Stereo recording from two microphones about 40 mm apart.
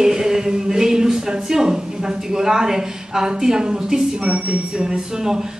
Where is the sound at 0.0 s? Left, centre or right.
Centre.